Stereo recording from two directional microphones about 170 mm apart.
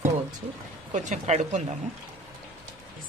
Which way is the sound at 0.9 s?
45° right (ahead or behind).